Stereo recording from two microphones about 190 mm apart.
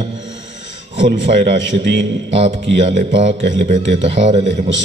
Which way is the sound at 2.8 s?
40° right (ahead or behind).